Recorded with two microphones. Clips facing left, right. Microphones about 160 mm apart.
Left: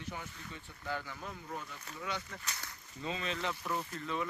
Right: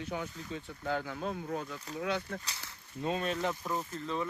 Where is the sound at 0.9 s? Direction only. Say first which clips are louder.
Right 6 dB; 65° right (ahead or behind).